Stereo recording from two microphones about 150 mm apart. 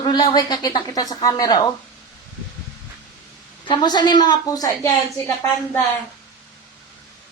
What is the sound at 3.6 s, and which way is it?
A woman's voice, 30° left (ahead or behind).